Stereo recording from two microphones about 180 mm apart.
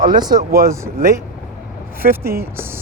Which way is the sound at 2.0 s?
50° right (ahead or behind).